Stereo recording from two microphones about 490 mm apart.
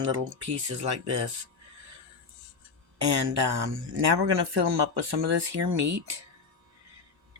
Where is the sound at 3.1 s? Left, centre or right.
Right.